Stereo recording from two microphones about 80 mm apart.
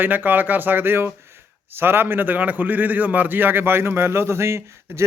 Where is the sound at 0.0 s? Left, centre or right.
Right.